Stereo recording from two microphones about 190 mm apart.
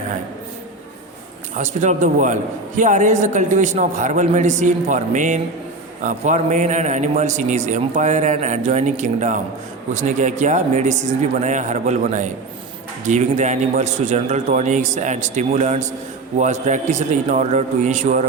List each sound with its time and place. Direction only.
1.5 s a man's voice: 40° right (ahead or behind)